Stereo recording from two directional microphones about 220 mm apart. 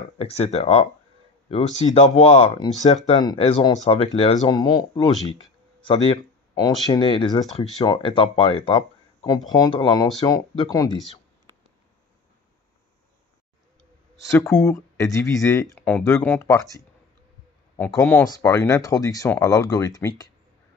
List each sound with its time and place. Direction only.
0.2 s speech: 25° left (ahead or behind)
5.8 s a sound: 25° left (ahead or behind)
6.9 s speech: 20° left (ahead or behind)
14.1 s speech: 15° left (ahead or behind)
17.7 s speech: 5° left (ahead or behind)